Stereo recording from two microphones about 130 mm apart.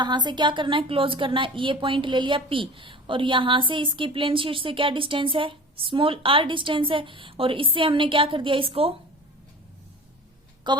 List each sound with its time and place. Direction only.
0.0 s a woman's voice: 35° right (ahead or behind)
10.7 s a woman's voice: 35° right (ahead or behind)